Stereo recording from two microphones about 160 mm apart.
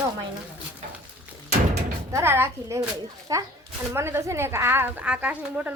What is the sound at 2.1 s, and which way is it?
A child's voice, 15° right (ahead or behind).